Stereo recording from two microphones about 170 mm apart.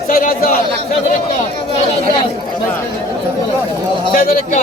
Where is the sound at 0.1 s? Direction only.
55° left (ahead or behind).